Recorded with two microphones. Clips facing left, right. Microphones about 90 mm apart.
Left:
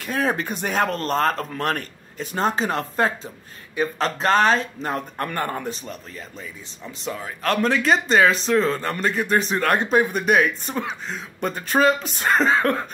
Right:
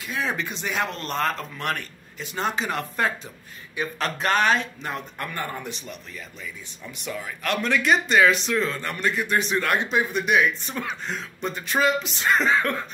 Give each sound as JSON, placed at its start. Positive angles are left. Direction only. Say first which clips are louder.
{"t": 0.0, "sound": "speech", "louder": "left 5 dB", "side_deg": 45}